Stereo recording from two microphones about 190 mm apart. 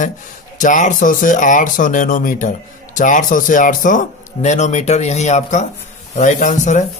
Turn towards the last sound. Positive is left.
turn(degrees=40)  # may be behind; listen again after turning